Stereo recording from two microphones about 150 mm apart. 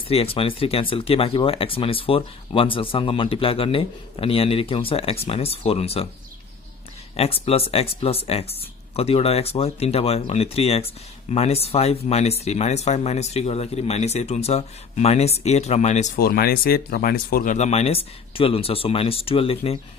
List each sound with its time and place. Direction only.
0.1 s speech: 40° left (ahead or behind)
7.2 s speech: 40° left (ahead or behind)
16.2 s speech: 90° left; by 17.6 s 70° left (ahead or behind)
17.6 s speech: 45° left (ahead or behind)